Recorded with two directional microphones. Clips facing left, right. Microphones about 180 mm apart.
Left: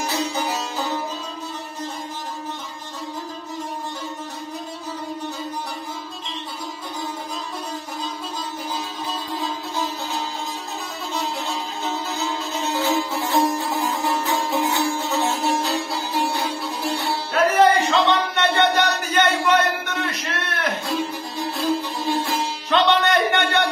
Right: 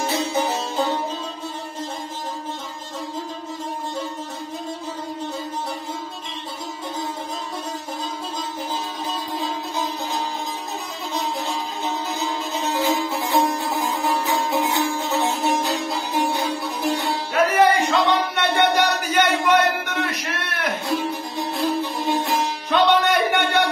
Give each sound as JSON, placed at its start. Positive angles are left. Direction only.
{"t": 0.0, "sound": "music", "side_deg": -25}
{"t": 11.8, "sound": "music", "side_deg": -15}